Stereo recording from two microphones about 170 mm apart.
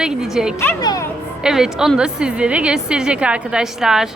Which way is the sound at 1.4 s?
5° right (ahead or behind).